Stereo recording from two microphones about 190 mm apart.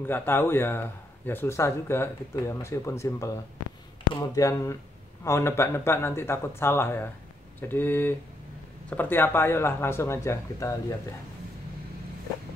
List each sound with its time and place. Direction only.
0.0 s speech: 10° left (ahead or behind)